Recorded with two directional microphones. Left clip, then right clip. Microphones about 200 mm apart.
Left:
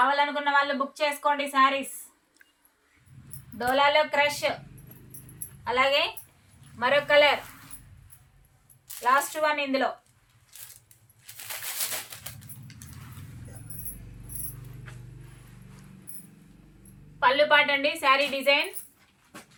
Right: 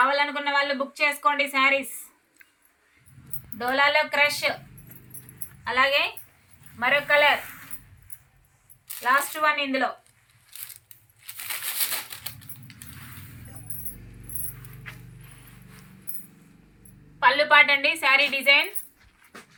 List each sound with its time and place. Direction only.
0.0 s a woman's voice: 10° left (ahead or behind)
3.7 s a woman's voice: 10° left (ahead or behind)
6.7 s speech: 35° left (ahead or behind)
9.0 s a woman's voice: 20° left (ahead or behind)
11.3 s a sound: 10° left (ahead or behind)
17.2 s a woman's voice: 20° left (ahead or behind)